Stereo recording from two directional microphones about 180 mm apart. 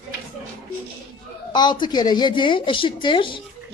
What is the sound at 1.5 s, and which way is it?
A woman's voice, 25° left (ahead or behind).